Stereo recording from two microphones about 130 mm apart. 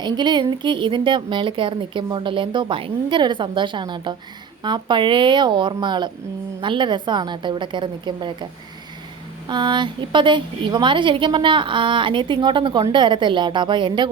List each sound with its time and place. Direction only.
0.0 s speech: 35° right (ahead or behind)
9.5 s speech: 35° right (ahead or behind)